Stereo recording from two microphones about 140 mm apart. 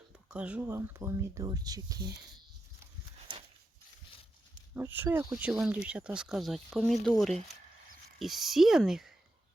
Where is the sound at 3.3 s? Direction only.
40° right (ahead or behind).